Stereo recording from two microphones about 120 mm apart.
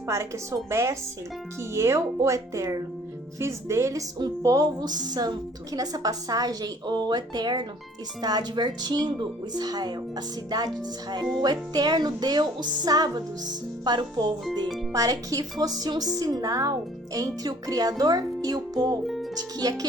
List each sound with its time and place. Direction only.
0.7 s a woman's voice: 25° right (ahead or behind)
19.0 s music: centre (ahead or behind)
19.4 s a woman's voice: 30° right (ahead or behind)